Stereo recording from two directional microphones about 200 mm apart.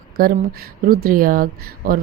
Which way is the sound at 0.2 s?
45° right (ahead or behind).